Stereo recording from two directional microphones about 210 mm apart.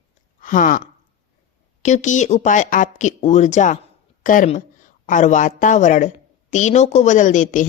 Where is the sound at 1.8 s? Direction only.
35° left (ahead or behind).